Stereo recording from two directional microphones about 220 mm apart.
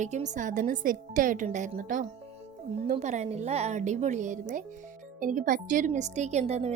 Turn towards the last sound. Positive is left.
turn(degrees=-30)  # may be behind; listen again after turning